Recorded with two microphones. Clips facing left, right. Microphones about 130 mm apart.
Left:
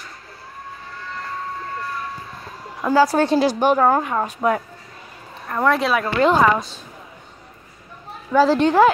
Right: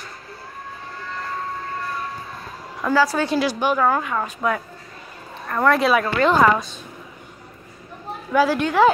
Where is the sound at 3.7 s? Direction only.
30° left (ahead or behind).